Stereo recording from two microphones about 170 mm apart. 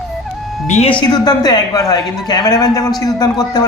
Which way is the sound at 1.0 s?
25° left (ahead or behind).